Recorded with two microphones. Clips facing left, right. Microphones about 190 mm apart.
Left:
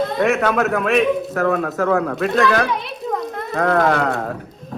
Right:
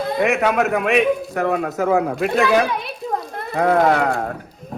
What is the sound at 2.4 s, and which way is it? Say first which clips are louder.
A man's voice: right 1 dB; 5° right (ahead or behind).